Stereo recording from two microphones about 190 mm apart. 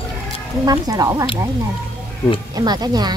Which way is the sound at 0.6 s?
20° right (ahead or behind).